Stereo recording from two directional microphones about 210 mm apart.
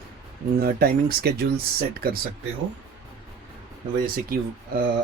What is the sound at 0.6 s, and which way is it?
Speech, 45° right (ahead or behind).